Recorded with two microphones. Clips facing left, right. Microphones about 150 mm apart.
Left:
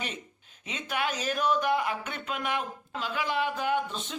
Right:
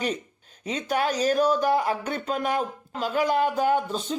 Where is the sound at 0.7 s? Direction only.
40° right (ahead or behind).